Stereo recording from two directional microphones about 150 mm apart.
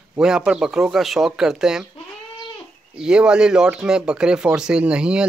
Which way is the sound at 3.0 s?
5° right (ahead or behind).